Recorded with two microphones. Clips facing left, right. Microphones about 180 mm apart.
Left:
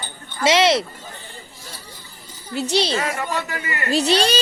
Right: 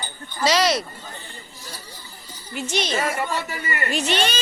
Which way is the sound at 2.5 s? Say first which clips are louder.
Left 5 dB; 35° left (ahead or behind).